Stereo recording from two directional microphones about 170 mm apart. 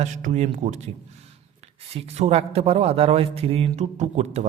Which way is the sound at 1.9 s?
40° right (ahead or behind).